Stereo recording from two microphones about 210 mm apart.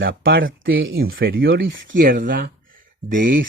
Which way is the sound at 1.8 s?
45° right (ahead or behind).